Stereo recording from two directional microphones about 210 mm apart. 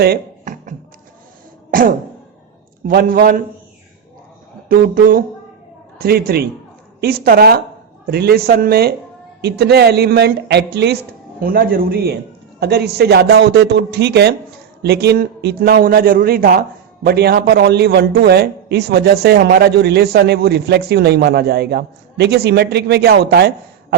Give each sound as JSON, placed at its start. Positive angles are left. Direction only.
{"t": 0.0, "sound": "music", "side_deg": -45}
{"t": 1.7, "sound": "a sound", "side_deg": -40}
{"t": 2.8, "sound": "a man's voice", "side_deg": -45}
{"t": 4.7, "sound": "a man's voice", "side_deg": -40}